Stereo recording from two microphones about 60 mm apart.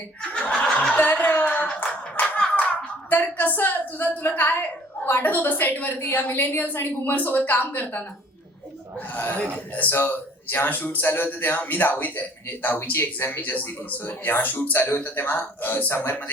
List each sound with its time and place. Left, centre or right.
0.2 s snicker: centre
0.9 s a sound: left
1.6 s clapping: centre
2.1 s hands: left
3.1 s a woman's voice: left